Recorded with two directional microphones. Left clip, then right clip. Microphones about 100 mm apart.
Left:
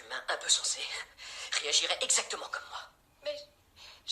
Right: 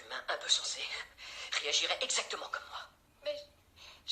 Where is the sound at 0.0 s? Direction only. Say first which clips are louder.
Left 3 dB; 30° left (ahead or behind).